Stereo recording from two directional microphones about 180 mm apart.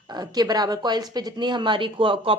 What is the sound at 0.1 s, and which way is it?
A woman's voice, 25° right (ahead or behind).